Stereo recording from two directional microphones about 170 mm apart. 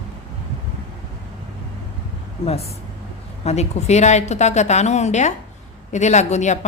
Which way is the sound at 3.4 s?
40° left (ahead or behind).